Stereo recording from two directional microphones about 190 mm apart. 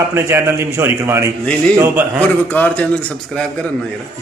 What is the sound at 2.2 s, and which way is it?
Speech, 10° left (ahead or behind).